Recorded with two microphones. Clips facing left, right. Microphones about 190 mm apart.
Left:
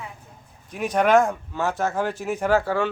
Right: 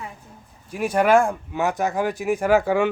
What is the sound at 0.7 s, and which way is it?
Speech, 10° right (ahead or behind).